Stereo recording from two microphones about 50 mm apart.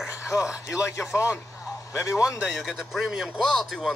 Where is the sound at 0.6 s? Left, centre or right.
Left.